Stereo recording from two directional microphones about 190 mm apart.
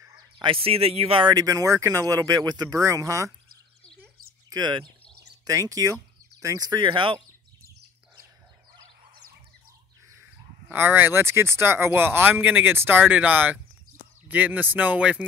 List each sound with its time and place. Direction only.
0.0 s speech: 20° right (ahead or behind)
4.5 s speech: 20° right (ahead or behind)
10.7 s speech: 10° right (ahead or behind)